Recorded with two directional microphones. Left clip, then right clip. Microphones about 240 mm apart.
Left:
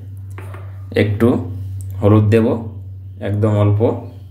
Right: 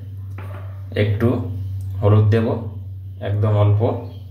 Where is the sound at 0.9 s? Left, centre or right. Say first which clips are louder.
Left 5 dB; left.